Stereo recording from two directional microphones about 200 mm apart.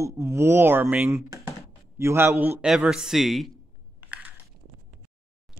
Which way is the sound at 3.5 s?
10° right (ahead or behind).